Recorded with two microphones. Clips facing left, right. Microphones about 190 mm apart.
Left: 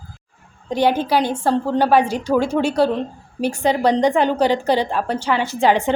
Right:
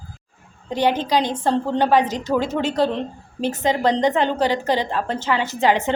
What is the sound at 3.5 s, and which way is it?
Speech, 20° right (ahead or behind).